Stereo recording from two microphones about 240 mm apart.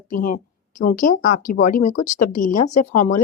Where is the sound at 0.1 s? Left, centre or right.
Left.